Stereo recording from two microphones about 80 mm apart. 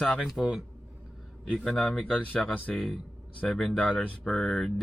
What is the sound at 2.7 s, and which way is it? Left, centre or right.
Speech, centre.